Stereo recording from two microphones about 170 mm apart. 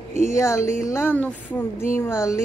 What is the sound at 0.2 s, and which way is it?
A woman's voice, 15° left (ahead or behind).